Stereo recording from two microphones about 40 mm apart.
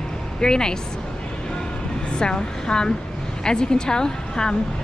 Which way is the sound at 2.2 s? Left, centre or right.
Centre.